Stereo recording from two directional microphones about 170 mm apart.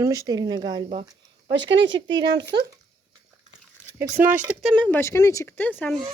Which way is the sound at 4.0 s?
10° right (ahead or behind).